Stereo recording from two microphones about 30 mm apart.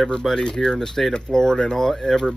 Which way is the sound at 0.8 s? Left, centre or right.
Centre.